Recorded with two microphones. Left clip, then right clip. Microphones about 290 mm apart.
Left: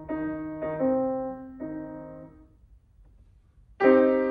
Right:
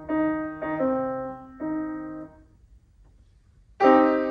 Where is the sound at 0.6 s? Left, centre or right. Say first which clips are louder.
Left 1 dB; centre.